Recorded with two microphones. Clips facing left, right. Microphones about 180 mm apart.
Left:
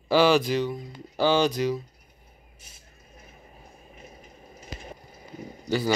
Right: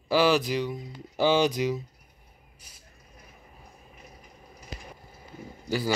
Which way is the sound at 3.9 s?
25° left (ahead or behind).